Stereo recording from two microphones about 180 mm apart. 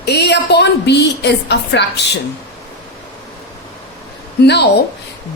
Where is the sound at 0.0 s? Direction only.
70° left (ahead or behind).